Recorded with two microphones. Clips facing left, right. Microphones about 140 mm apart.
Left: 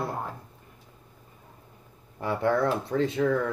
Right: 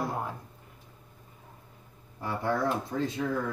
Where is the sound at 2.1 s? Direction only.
70° left (ahead or behind).